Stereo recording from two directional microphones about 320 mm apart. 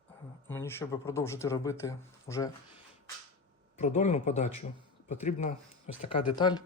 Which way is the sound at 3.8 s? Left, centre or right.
Left.